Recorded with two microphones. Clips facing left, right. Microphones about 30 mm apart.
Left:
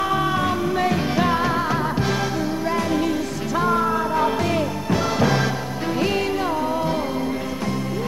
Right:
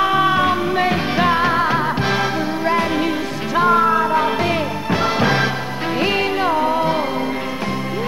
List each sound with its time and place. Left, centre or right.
0.0 s music: right